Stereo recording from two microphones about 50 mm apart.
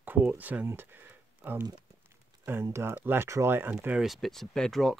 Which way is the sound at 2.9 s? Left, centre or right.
Right.